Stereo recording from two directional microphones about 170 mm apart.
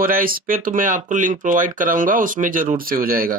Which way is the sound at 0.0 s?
55° right (ahead or behind).